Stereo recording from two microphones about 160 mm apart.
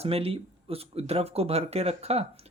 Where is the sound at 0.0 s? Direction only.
40° right (ahead or behind).